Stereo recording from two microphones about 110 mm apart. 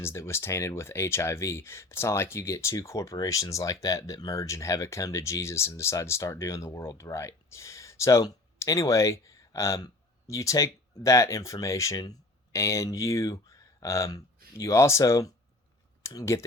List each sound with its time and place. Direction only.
0.0 s speech: 25° left (ahead or behind)